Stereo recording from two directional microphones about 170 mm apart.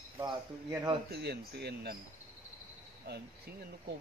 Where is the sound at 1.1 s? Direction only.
70° right (ahead or behind).